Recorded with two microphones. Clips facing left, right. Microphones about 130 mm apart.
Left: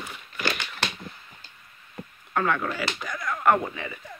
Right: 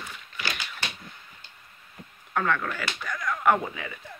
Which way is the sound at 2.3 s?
5° left (ahead or behind).